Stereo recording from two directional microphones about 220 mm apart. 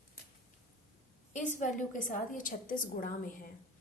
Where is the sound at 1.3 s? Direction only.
35° left (ahead or behind).